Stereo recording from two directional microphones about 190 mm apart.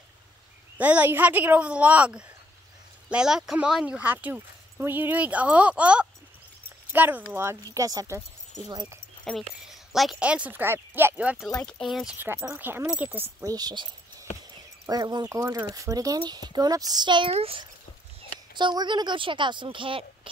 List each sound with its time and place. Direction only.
0.7 s speech: 10° right (ahead or behind)
9.7 s speech: centre (ahead or behind); by 13.8 s 20° right (ahead or behind)
14.9 s speech: 20° right (ahead or behind)